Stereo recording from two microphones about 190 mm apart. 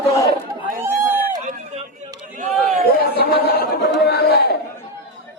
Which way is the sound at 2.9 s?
55° left (ahead or behind).